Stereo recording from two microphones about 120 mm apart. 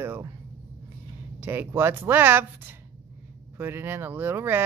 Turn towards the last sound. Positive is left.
turn(degrees=-20)  # may be behind; listen again after turning